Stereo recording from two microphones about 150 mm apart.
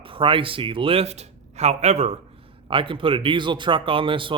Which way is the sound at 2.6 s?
35° right (ahead or behind).